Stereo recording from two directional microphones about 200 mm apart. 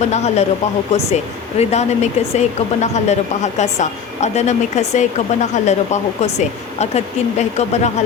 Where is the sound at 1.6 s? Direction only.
35° left (ahead or behind).